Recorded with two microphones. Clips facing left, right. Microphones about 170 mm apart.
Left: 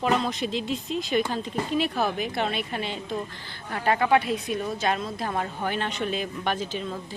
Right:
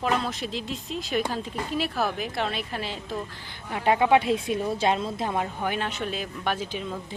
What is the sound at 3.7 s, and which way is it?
Speech, 15° right (ahead or behind).